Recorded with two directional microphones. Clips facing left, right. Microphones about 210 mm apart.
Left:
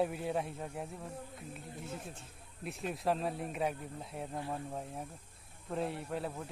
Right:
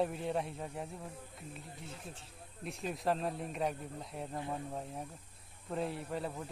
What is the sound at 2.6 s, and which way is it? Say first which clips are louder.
Speech: left 1 dB; centre (ahead or behind).